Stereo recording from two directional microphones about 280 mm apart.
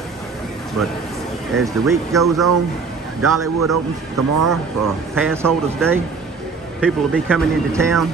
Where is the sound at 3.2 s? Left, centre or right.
Right.